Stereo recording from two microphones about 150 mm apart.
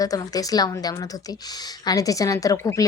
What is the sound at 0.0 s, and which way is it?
A woman's voice, 25° left (ahead or behind).